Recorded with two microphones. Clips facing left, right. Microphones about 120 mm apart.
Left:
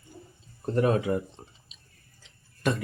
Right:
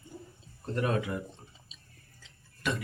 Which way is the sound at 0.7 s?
35° left (ahead or behind).